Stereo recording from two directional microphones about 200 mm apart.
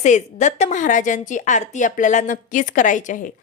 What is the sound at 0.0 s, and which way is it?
A woman's voice, 35° left (ahead or behind).